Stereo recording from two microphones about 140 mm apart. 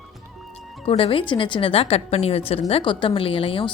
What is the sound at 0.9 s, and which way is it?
A woman's voice, 40° left (ahead or behind).